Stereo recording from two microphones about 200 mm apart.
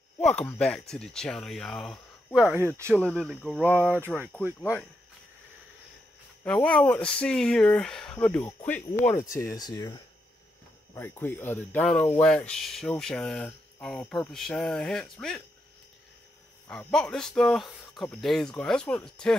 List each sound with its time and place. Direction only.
0.2 s speech: 5° left (ahead or behind); by 3.0 s 10° right (ahead or behind)
3.0 s speech: 5° left (ahead or behind)
3.3 s speech: 5° right (ahead or behind)
6.4 s speech: 5° left (ahead or behind)
9.3 s speech: 15° left (ahead or behind)
16.6 s speech: 5° left (ahead or behind)